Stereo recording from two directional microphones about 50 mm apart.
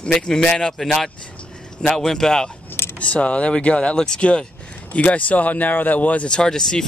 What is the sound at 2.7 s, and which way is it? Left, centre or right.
Vehicle, left.